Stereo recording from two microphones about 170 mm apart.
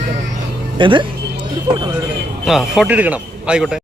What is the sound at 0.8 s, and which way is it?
Speech, 30° right (ahead or behind).